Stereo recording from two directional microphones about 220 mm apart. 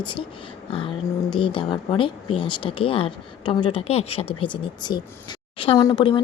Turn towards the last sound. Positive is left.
turn(degrees=25)  # may be behind; listen again after turning